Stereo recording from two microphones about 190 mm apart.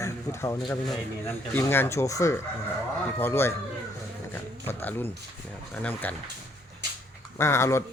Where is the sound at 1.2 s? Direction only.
10° left (ahead or behind).